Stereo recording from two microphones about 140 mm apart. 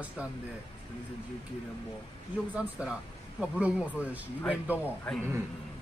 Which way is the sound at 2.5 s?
10° right (ahead or behind).